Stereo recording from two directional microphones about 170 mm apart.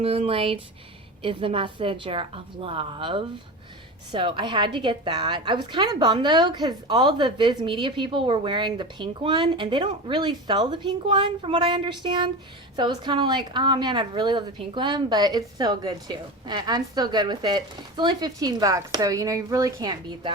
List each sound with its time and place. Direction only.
0.0 s a woman's voice: 35° right (ahead or behind)